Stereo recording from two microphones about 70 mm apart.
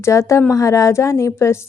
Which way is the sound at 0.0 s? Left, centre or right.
Left.